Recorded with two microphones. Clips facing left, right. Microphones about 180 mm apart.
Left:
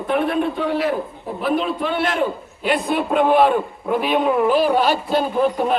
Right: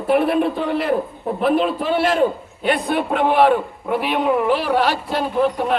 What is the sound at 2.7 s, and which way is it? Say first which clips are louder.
A man's voice: even; 65° right (ahead or behind).